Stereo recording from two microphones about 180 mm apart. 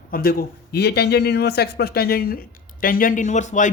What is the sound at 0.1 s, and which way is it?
A man's voice, 55° left (ahead or behind).